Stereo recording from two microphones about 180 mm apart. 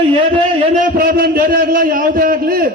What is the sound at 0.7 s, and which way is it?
A man's voice, 50° right (ahead or behind).